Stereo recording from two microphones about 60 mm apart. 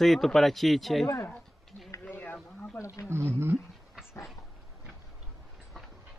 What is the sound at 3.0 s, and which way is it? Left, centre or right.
Speech, right.